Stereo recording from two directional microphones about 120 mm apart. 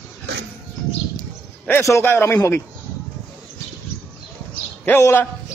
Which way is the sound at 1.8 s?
20° left (ahead or behind).